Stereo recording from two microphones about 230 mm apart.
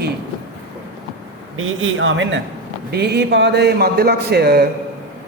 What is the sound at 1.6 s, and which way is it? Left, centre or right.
Speech, right.